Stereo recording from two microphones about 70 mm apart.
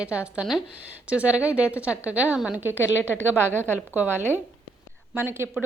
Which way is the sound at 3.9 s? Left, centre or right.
Right.